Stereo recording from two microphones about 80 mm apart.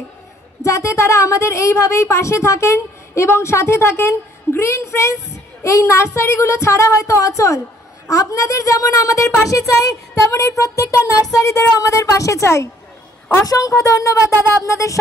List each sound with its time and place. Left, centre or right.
0.6 s a woman's voice: left